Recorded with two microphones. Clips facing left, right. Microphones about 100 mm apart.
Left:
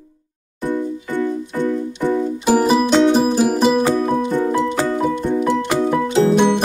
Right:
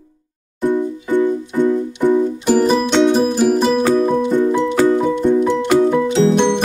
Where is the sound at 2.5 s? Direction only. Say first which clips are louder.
Left 1 dB; 5° left (ahead or behind).